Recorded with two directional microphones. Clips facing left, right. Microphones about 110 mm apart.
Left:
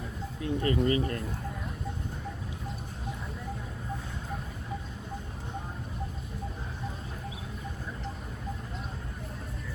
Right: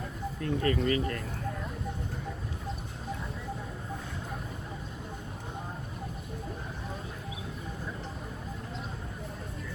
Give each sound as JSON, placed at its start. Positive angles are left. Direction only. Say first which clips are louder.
{"t": 0.4, "sound": "speech", "louder": "left 1 dB", "side_deg": 20}